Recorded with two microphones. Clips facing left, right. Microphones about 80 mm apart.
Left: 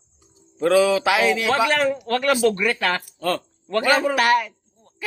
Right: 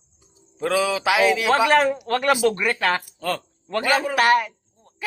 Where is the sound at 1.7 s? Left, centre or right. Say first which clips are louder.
Right 2 dB; right.